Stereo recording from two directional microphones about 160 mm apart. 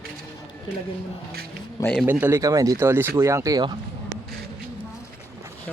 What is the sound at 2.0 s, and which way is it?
Speech, 10° right (ahead or behind).